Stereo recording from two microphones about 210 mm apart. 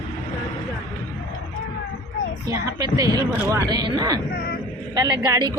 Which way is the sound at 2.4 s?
15° right (ahead or behind).